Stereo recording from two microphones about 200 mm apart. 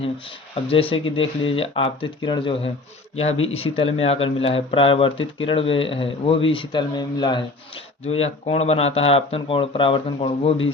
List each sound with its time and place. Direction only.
0.0 s speech: 30° left (ahead or behind)